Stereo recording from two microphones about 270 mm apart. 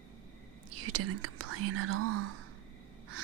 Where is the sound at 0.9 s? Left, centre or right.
Right.